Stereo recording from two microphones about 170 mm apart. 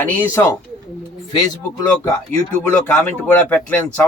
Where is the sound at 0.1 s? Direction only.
15° left (ahead or behind).